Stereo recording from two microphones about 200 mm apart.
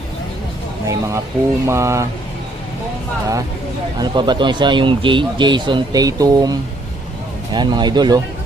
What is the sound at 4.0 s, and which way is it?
Speech, 20° right (ahead or behind).